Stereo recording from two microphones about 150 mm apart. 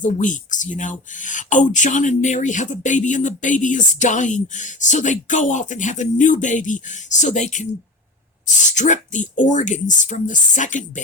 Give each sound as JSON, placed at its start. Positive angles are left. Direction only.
{"t": 0.0, "sound": "speech", "side_deg": 60}